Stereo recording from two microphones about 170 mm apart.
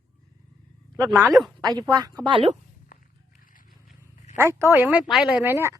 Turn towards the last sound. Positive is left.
turn(degrees=-15)  # may be behind; listen again after turning